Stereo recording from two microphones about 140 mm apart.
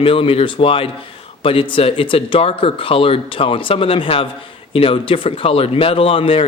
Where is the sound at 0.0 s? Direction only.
40° left (ahead or behind).